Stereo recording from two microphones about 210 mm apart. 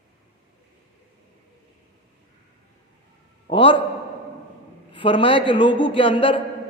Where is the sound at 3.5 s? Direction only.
25° left (ahead or behind).